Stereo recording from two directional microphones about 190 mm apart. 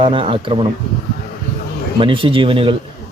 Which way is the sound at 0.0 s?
25° right (ahead or behind).